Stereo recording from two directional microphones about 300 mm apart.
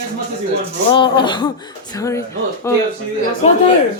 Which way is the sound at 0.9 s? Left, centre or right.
Centre.